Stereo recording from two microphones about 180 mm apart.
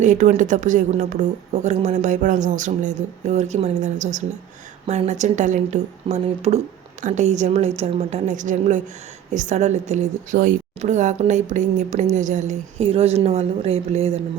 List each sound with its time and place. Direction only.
0.0 s a woman's voice: 45° right (ahead or behind)